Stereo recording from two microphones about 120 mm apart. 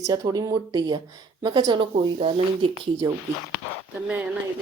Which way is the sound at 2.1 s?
50° right (ahead or behind).